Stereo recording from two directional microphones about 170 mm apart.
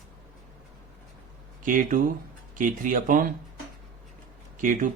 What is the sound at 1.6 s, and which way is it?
Speech, 50° right (ahead or behind).